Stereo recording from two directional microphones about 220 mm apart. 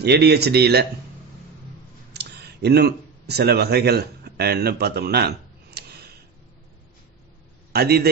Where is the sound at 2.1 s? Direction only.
50° right (ahead or behind).